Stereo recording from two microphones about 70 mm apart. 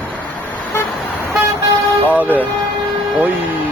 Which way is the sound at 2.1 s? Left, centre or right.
Right.